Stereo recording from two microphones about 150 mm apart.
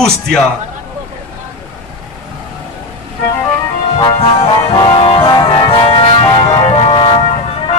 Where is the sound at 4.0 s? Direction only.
35° left (ahead or behind).